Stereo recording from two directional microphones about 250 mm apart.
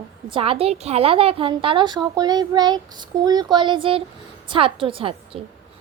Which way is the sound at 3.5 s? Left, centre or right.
Centre.